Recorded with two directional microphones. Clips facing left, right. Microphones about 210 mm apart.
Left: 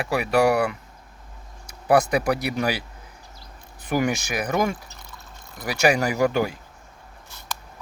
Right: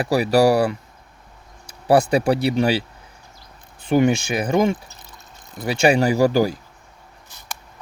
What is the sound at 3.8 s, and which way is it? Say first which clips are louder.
Speech: right 6 dB; 25° right (ahead or behind).